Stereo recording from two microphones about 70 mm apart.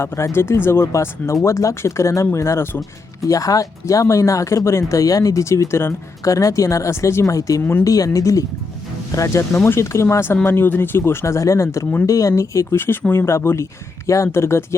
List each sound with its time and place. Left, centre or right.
0.0 s speech: left
3.2 s speech: left
7.6 s speech: left
7.9 s speech: left
12.7 s speech: left